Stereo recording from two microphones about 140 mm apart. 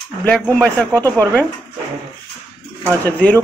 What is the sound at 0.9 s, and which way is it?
Speech, 25° right (ahead or behind).